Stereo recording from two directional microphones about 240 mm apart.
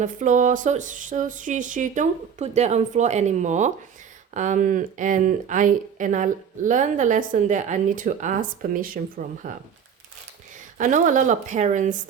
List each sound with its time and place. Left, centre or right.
0.0 s speech: right
10.8 s speech: right